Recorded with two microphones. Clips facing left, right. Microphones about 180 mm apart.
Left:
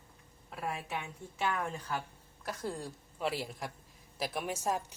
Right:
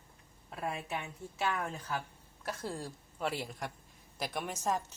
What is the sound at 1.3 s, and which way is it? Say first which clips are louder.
A woman's voice: left 1 dB; 5° right (ahead or behind).